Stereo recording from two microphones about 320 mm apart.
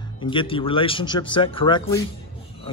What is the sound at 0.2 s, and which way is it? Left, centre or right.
A man's voice, centre.